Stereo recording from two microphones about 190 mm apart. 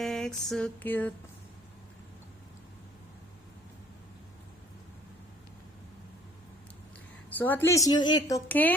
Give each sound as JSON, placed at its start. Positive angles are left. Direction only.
{"t": 0.0, "sound": "a sound", "side_deg": 0}
{"t": 7.3, "sound": "speech", "side_deg": 10}
{"t": 8.4, "sound": "speech", "side_deg": 10}